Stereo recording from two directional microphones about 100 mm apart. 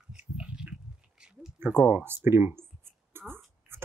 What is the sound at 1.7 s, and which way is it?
Speech, 20° right (ahead or behind).